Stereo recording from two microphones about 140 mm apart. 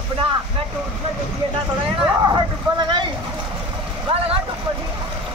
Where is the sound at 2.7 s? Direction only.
30° right (ahead or behind).